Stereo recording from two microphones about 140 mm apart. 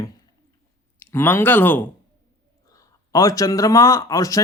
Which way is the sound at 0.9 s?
15° left (ahead or behind).